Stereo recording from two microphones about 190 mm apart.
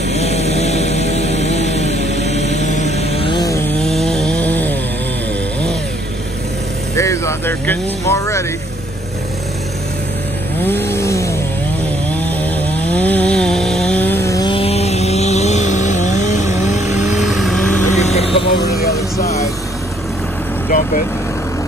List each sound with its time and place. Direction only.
0.1 s a sound: 35° left (ahead or behind)
2.1 s mantra: 35° left (ahead or behind)
3.3 s chainsaw: 15° left (ahead or behind)
3.8 s chainsaw: centre (ahead or behind)
7.0 s vehicle: 15° left (ahead or behind)
10.6 s chainsaw: 10° left (ahead or behind); by 17.2 s 40° left (ahead or behind)
17.2 s vehicle: centre (ahead or behind)
17.9 s vehicle: 35° left (ahead or behind)